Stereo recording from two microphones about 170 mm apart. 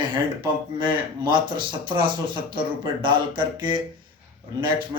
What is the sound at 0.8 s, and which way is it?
A man's voice, 25° right (ahead or behind).